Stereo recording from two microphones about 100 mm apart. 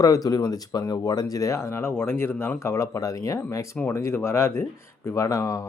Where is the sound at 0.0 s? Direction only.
35° left (ahead or behind).